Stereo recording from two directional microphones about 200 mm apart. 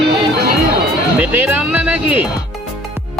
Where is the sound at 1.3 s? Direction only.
10° right (ahead or behind).